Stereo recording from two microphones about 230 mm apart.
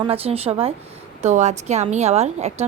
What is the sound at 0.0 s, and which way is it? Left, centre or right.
Speech, right.